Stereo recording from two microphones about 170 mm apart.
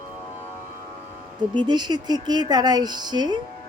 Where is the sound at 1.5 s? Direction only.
25° right (ahead or behind).